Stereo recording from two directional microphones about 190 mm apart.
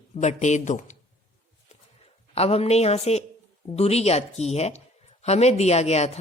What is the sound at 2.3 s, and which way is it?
Speech, 30° left (ahead or behind).